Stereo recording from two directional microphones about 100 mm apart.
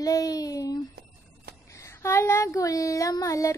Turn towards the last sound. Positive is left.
turn(degrees=30)  # may be behind; listen again after turning